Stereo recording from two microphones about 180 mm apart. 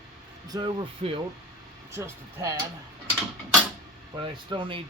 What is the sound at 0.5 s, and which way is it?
Speech, 25° right (ahead or behind).